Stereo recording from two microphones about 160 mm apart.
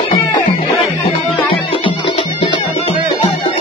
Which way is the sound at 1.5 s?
35° left (ahead or behind).